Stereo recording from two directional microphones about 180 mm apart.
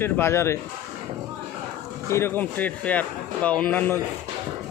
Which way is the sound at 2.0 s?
15° left (ahead or behind).